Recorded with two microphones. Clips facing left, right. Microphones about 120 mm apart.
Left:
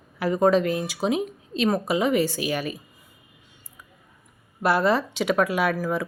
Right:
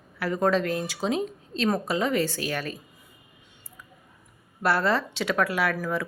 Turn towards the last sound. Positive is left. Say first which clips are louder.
# left 3 dB
turn(degrees=15)  # may be behind; listen again after turning